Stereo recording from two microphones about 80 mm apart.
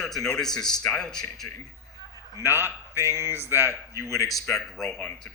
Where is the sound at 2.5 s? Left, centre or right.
Right.